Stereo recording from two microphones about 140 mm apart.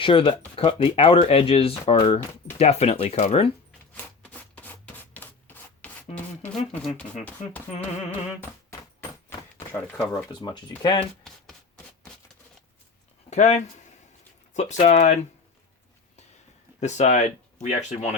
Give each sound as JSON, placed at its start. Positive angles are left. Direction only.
{"t": 0.0, "sound": "speech", "side_deg": 35}
{"t": 3.9, "sound": "rub", "side_deg": 10}
{"t": 6.1, "sound": "a sound", "side_deg": 10}
{"t": 9.8, "sound": "speech", "side_deg": 5}
{"t": 10.4, "sound": "speech", "side_deg": 35}
{"t": 13.3, "sound": "speech", "side_deg": 55}
{"t": 16.8, "sound": "speech", "side_deg": 55}